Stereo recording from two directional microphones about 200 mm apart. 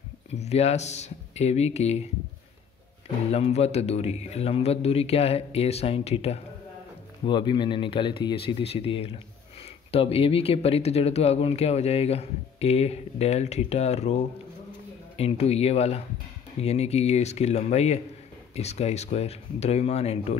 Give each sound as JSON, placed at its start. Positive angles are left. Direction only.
{"t": 0.3, "sound": "speech", "side_deg": 30}
{"t": 3.3, "sound": "speech", "side_deg": 30}